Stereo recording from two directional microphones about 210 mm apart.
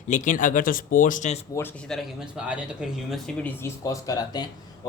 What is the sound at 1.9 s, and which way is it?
Speech, centre (ahead or behind).